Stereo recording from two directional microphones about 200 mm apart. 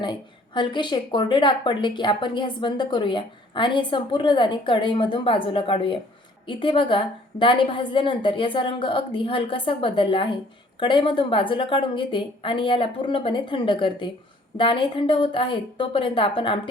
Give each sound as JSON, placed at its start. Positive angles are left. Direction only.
{"t": 0.0, "sound": "a woman's voice", "side_deg": 25}